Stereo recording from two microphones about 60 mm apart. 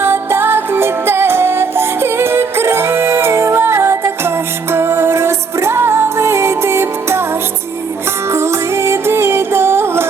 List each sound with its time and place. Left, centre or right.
0.0 s music: right
8.3 s music: right